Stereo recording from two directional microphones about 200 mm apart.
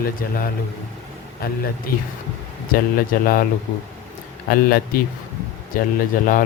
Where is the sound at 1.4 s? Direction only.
50° left (ahead or behind).